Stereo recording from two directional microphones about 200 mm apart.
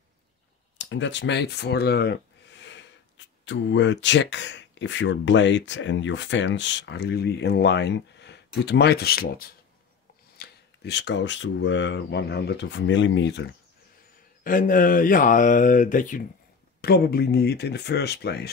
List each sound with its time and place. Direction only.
0.7 s speech: 65° left (ahead or behind)
14.4 s mantra: 40° left (ahead or behind)
16.8 s speech: 50° left (ahead or behind)